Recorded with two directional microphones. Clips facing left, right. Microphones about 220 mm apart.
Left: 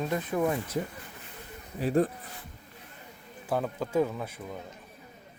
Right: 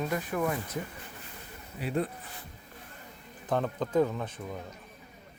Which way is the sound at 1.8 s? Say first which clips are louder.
Left 6 dB; 40° left (ahead or behind).